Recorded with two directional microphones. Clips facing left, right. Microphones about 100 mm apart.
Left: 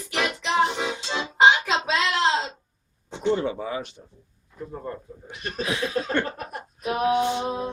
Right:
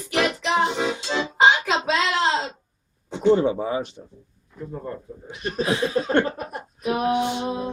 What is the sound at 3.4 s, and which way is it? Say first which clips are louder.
Speech: right 5 dB; 25° right (ahead or behind).